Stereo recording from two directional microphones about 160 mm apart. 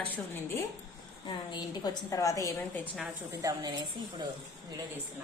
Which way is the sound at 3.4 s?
25° right (ahead or behind).